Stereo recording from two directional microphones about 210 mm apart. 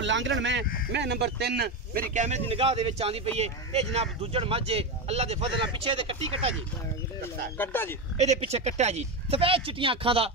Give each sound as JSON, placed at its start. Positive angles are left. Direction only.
{"t": 0.0, "sound": "speech", "side_deg": -60}
{"t": 2.1, "sound": "speech", "side_deg": -35}
{"t": 7.5, "sound": "speech", "side_deg": 10}
{"t": 8.5, "sound": "speech", "side_deg": -30}